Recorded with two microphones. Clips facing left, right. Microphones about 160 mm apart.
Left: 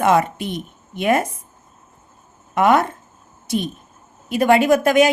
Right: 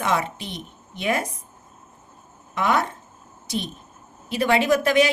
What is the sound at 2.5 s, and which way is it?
Speech, 50° left (ahead or behind).